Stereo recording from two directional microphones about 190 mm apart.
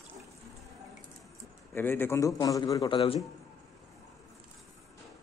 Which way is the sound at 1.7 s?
10° left (ahead or behind).